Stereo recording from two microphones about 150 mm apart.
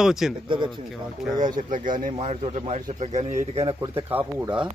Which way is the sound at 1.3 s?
30° right (ahead or behind).